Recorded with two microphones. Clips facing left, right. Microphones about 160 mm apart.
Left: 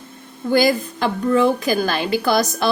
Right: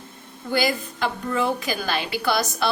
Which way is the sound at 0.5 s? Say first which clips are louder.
Left 7 dB; 45° left (ahead or behind).